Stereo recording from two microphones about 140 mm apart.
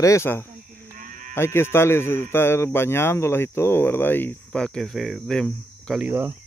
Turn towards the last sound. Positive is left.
turn(degrees=-15)  # may be behind; listen again after turning